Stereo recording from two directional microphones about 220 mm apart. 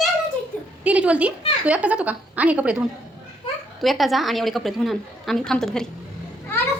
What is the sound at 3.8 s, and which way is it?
A woman's voice, centre (ahead or behind).